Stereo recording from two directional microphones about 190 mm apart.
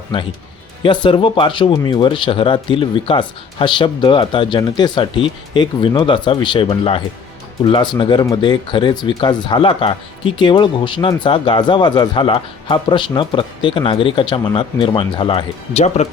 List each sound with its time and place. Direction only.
0.1 s speech: 25° left (ahead or behind)